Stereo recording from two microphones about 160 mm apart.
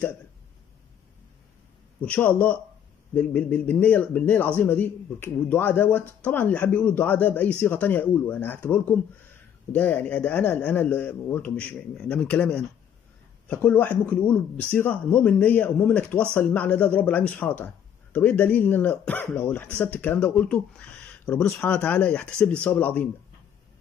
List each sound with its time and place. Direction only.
2.0 s speech: 10° left (ahead or behind)